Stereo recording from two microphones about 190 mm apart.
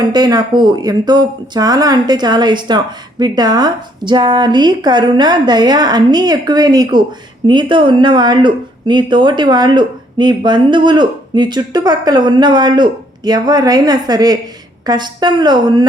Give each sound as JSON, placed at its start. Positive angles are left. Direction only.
{"t": 0.1, "sound": "speech", "side_deg": -20}